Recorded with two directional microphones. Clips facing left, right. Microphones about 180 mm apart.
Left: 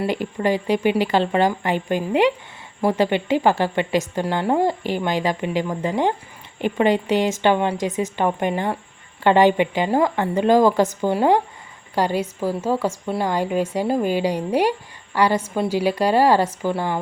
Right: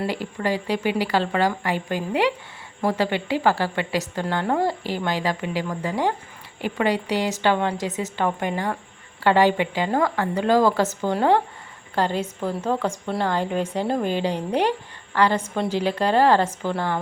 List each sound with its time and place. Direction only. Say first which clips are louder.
0.1 s a woman's voice: left 4 dB; 20° left (ahead or behind)